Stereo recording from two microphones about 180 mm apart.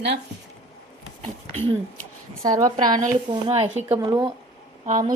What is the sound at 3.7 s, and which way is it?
Speech, 10° right (ahead or behind).